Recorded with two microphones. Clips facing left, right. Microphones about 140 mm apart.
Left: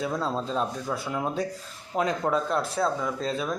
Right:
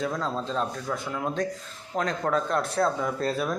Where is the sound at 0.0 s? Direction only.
10° left (ahead or behind).